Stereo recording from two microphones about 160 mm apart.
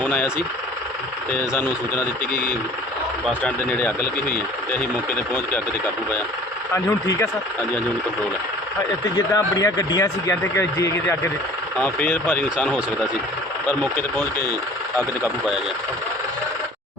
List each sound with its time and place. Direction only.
0.0 s speech: 10° left (ahead or behind)
1.4 s speech: 15° left (ahead or behind)
3.2 s speech: 5° left (ahead or behind)
6.7 s speech: 15° left (ahead or behind)
9.1 s speech: 20° left (ahead or behind)